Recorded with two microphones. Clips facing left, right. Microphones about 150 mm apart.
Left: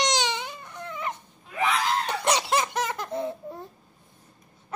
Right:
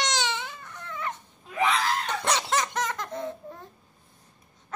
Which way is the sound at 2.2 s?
10° left (ahead or behind).